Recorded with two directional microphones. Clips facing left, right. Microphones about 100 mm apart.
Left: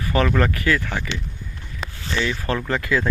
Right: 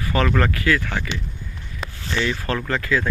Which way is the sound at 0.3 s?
20° left (ahead or behind).